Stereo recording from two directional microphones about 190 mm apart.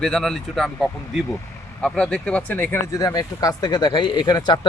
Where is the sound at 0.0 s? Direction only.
5° left (ahead or behind).